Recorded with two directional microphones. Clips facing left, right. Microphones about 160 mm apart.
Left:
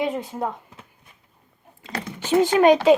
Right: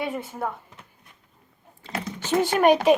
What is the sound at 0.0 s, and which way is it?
Speech, 20° left (ahead or behind).